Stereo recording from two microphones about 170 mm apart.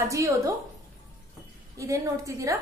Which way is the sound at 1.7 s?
20° right (ahead or behind).